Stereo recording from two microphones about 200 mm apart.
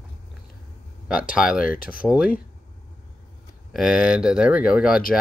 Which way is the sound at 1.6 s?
45° left (ahead or behind).